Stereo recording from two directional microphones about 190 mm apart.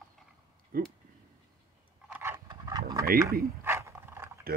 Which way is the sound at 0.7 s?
50° right (ahead or behind).